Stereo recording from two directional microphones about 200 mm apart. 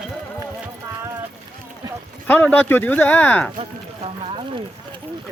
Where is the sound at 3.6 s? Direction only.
30° right (ahead or behind).